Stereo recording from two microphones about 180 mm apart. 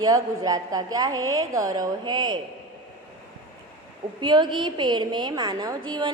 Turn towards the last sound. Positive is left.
turn(degrees=-25)  # may be behind; listen again after turning